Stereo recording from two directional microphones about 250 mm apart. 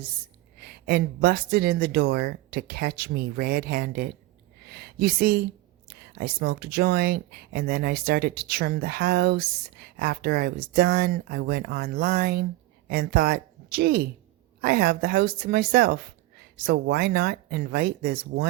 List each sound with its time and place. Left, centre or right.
0.6 s speech: right